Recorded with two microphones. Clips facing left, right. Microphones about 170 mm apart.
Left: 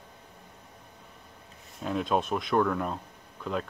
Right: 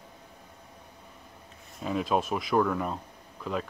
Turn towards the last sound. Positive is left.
turn(degrees=0)  # may be behind; listen again after turning